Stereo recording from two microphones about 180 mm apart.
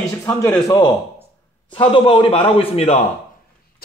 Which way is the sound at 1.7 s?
30° left (ahead or behind).